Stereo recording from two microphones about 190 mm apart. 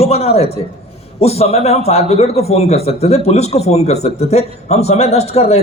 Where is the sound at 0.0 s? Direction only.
30° left (ahead or behind).